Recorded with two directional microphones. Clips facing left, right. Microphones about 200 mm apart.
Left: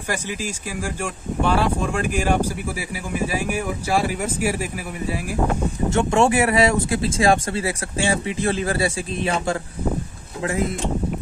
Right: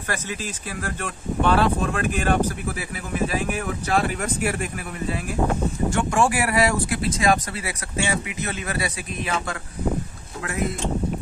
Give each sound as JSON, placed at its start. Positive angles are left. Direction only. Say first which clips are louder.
{"t": 0.1, "sound": "speech", "louder": "left 3 dB", "side_deg": 10}
{"t": 5.9, "sound": "speech", "louder": "left 4 dB", "side_deg": 25}